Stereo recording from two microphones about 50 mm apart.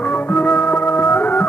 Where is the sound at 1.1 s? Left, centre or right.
Left.